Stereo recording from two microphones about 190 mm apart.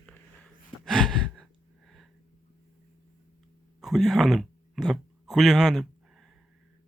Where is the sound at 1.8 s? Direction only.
Centre (ahead or behind).